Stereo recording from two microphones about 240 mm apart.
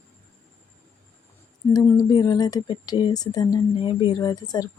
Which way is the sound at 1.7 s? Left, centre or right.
Centre.